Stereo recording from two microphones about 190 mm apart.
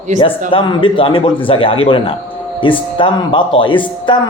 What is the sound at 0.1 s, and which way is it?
Speech, 40° right (ahead or behind).